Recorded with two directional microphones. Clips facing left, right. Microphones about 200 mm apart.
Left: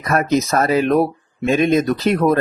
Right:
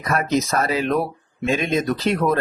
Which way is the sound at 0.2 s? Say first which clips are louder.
Left 5 dB; 45° left (ahead or behind).